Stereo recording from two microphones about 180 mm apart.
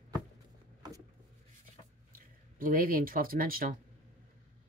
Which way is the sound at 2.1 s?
50° right (ahead or behind).